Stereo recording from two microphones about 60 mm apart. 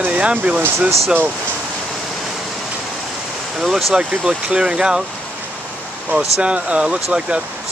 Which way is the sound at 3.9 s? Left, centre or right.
Centre.